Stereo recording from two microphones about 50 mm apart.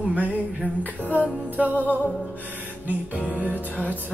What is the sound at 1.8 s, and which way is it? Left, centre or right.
Music, left.